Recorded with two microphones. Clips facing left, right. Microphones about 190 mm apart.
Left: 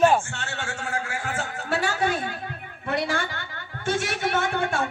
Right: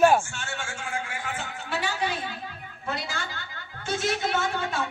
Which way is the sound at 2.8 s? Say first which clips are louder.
Left 7 dB; 55° left (ahead or behind).